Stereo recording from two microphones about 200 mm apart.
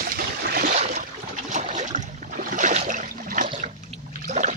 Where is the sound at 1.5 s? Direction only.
35° right (ahead or behind).